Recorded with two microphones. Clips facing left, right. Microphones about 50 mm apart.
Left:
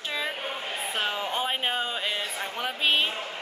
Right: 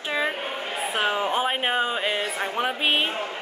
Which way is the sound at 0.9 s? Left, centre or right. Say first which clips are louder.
Right 6 dB; right.